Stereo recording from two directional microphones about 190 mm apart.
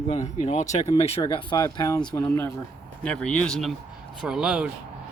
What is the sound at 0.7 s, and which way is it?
Speech, 30° left (ahead or behind).